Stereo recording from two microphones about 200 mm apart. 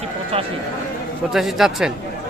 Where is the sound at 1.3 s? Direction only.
Centre (ahead or behind).